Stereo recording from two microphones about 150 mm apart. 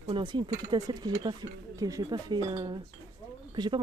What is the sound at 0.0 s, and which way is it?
Speech, 35° right (ahead or behind).